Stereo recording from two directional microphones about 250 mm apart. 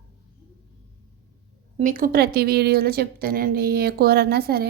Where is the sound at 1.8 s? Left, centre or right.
Right.